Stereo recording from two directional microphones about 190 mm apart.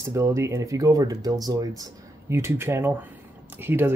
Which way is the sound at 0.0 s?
15° right (ahead or behind).